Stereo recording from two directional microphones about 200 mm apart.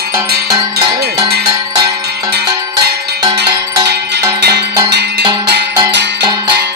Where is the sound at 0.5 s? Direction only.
20° right (ahead or behind).